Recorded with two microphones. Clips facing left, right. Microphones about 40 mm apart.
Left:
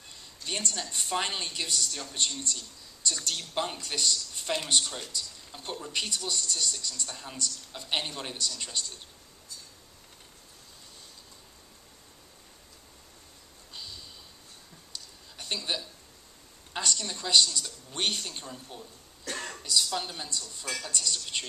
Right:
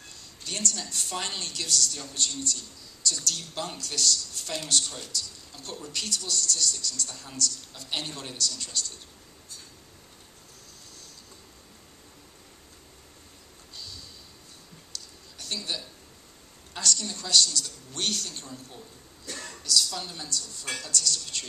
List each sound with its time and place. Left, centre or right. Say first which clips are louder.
0.1 s a woman's voice: left 2 dB; centre
13.7 s a sound: even; centre
16.7 s a woman's voice: right 1 dB; centre
19.2 s throat clearing: left 3 dB; left
19.5 s a woman's voice: right 2 dB; left